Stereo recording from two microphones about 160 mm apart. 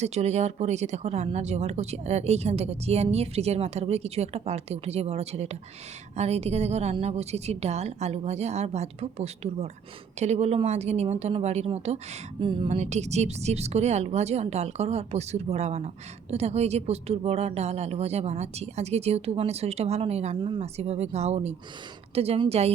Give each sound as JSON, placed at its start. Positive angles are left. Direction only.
{"t": 0.0, "sound": "speech", "side_deg": -45}